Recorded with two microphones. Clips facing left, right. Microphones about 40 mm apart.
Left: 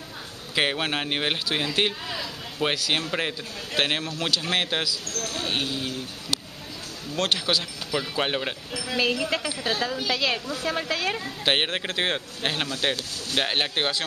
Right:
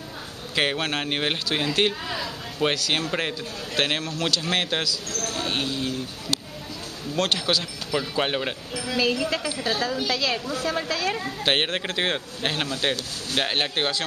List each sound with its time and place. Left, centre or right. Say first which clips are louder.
0.6 s speech: even; centre
7.2 s speech: right 1 dB; centre
8.9 s speech: right 1 dB; centre
11.4 s speech: even; centre